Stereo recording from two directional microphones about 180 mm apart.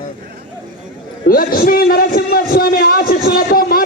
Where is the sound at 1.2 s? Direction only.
55° left (ahead or behind).